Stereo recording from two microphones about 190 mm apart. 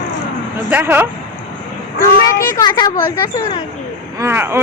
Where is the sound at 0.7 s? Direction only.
10° right (ahead or behind).